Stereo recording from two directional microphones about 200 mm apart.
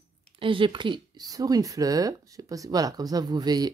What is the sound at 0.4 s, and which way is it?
Speech, 25° right (ahead or behind).